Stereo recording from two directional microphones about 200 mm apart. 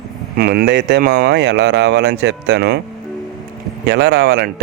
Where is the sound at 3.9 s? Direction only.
55° right (ahead or behind).